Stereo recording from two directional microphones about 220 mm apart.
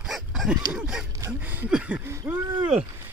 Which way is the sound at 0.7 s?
5° right (ahead or behind).